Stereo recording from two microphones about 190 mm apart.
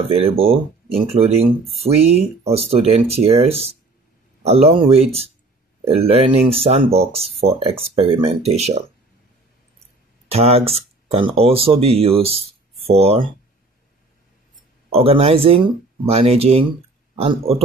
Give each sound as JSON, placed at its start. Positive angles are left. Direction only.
{"t": 0.1, "sound": "speech", "side_deg": -30}
{"t": 10.2, "sound": "speech", "side_deg": -30}
{"t": 14.9, "sound": "speech", "side_deg": -30}